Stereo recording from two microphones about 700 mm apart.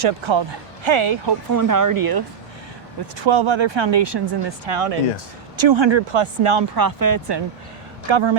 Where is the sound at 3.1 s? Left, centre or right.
Right.